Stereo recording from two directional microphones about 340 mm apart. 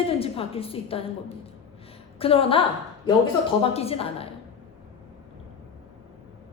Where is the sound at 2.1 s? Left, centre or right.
Centre.